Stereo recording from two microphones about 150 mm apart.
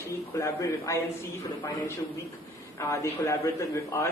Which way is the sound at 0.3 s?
20° left (ahead or behind).